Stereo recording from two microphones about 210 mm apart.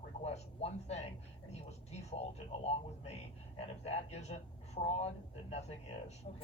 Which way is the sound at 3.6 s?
30° left (ahead or behind).